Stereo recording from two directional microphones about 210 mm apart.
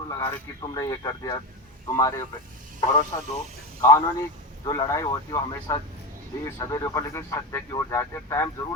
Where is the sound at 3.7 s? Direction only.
15° left (ahead or behind).